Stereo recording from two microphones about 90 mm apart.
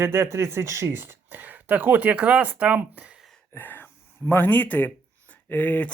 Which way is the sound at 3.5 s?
20° left (ahead or behind).